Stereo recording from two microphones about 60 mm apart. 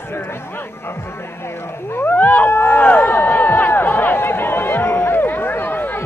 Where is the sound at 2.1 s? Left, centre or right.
Left.